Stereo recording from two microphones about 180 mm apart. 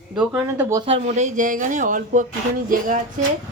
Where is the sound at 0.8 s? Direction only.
35° right (ahead or behind).